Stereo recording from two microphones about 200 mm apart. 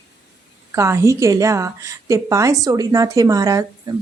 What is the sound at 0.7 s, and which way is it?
A woman's voice, 15° right (ahead or behind).